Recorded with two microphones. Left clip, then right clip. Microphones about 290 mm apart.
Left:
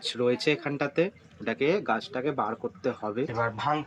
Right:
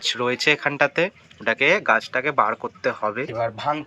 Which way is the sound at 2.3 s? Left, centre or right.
Centre.